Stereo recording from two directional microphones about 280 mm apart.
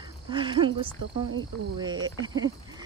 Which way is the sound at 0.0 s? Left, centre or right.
Centre.